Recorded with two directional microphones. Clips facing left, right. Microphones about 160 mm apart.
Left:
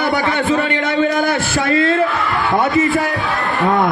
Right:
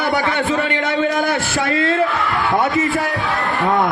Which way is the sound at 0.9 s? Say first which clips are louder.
Left 3 dB; 20° right (ahead or behind).